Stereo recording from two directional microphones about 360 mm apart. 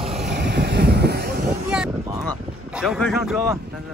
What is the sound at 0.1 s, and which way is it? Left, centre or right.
Vehicle, right.